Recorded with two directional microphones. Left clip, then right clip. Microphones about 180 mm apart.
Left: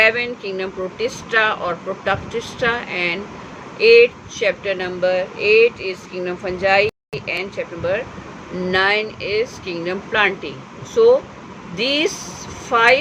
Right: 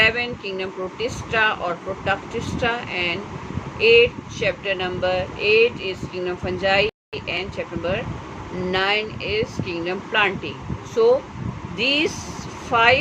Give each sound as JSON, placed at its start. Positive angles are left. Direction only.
{"t": 0.0, "sound": "speech", "side_deg": 20}